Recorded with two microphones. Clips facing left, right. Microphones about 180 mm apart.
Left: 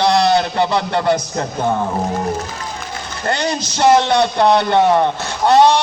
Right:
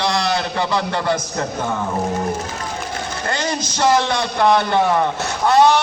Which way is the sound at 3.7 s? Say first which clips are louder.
Left 5 dB; 20° left (ahead or behind).